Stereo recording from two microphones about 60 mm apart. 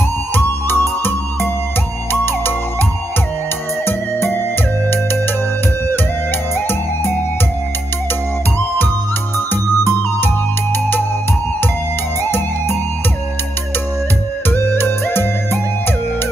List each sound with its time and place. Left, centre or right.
0.3 s music: left
3.8 s music: left
10.2 s music: left
12.2 s music: left
14.5 s music: left